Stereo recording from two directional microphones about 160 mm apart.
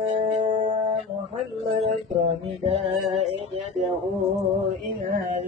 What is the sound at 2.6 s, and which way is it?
Music, 40° right (ahead or behind).